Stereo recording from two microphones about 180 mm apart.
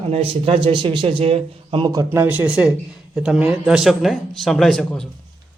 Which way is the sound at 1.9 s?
15° right (ahead or behind).